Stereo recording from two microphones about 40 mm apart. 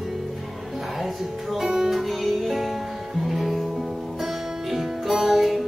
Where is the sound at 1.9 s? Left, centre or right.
Centre.